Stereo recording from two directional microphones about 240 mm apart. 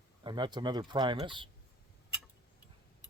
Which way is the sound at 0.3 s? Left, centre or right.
Centre.